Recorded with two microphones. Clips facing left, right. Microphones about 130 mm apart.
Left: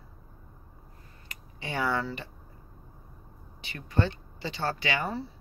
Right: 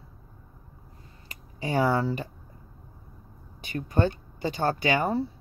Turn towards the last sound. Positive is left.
turn(degrees=-45)  # may be behind; listen again after turning